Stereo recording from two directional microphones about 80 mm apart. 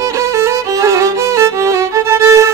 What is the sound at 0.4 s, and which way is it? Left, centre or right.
Music, right.